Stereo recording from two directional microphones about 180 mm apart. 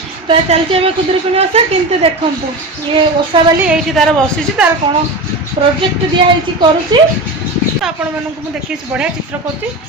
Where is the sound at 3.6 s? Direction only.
5° right (ahead or behind).